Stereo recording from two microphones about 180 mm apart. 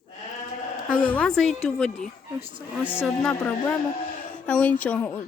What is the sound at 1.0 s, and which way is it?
Speech, 10° left (ahead or behind).